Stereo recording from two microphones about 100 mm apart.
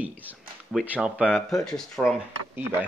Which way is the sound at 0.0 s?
15° right (ahead or behind).